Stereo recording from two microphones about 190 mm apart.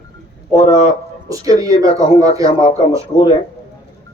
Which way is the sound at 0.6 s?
30° left (ahead or behind).